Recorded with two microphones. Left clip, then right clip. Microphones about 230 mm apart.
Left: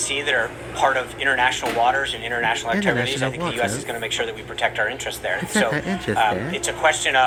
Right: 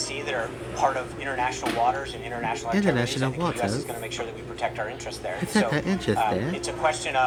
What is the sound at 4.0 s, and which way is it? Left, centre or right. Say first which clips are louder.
Speech: left 7 dB; left.